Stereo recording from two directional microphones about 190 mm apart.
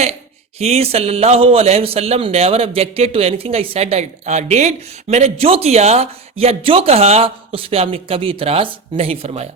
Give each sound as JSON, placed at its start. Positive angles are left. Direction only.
{"t": 0.6, "sound": "a man's voice", "side_deg": -30}